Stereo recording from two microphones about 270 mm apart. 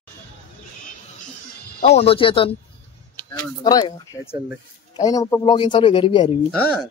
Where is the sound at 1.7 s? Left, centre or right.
Left.